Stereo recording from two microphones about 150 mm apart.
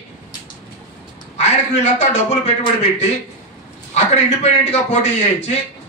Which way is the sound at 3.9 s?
45° left (ahead or behind).